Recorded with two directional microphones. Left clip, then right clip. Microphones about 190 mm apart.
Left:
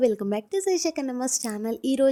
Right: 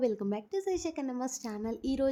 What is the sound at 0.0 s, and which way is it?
A woman's voice, 15° left (ahead or behind).